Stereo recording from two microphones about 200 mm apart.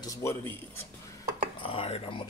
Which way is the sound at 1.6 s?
30° left (ahead or behind).